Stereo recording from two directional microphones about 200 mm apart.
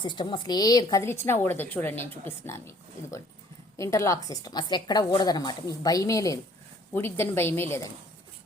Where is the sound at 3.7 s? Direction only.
15° left (ahead or behind).